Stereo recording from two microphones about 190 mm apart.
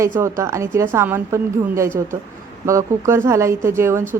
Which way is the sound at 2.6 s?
15° right (ahead or behind).